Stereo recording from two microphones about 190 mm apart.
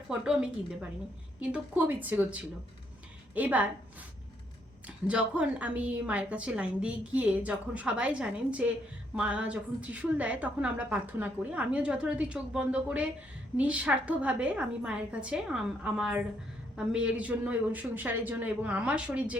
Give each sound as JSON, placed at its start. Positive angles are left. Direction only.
{"t": 0.1, "sound": "a woman's voice", "side_deg": -5}
{"t": 4.9, "sound": "a woman's voice", "side_deg": -5}